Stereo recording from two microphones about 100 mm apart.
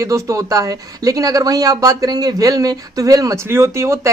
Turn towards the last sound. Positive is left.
turn(degrees=-30)  # may be behind; listen again after turning